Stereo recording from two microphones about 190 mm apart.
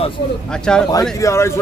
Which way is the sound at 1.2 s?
15° left (ahead or behind).